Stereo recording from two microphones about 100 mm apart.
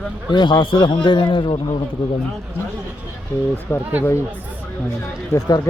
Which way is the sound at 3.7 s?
20° left (ahead or behind).